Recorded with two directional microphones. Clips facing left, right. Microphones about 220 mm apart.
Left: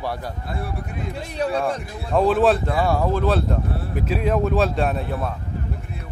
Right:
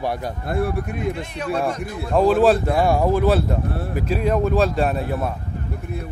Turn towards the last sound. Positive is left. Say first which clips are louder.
# right 2 dB
turn(degrees=-5)  # may be behind; listen again after turning